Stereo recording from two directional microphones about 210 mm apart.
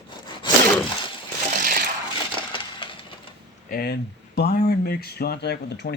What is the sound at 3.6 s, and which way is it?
Speech, 45° left (ahead or behind).